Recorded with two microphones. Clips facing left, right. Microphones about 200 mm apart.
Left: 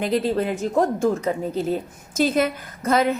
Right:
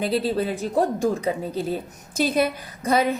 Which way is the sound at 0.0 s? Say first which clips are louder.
Left 1 dB; 30° right (ahead or behind).